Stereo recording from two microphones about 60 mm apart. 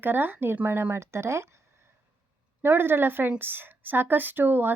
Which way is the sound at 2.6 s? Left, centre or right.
Right.